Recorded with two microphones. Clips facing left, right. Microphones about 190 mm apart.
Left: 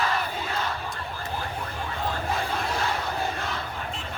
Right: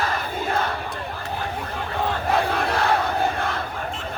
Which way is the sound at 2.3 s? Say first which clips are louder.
Right 6 dB; 65° right (ahead or behind).